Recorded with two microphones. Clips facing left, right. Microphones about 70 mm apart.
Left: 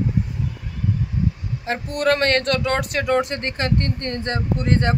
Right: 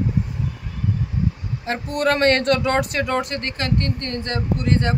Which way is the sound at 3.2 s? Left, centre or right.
Left.